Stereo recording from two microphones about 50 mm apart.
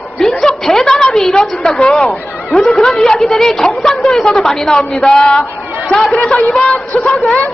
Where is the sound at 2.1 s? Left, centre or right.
Centre.